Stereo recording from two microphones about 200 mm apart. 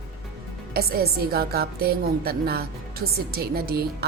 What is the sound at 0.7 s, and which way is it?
A woman's voice, 50° right (ahead or behind).